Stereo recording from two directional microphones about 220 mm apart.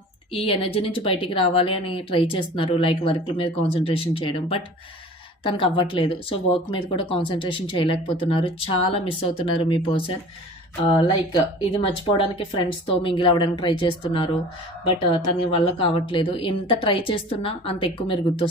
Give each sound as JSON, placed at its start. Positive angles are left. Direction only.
{"t": 0.3, "sound": "speech", "side_deg": 25}